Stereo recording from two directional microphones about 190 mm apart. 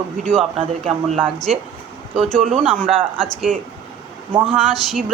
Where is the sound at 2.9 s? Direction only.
30° right (ahead or behind).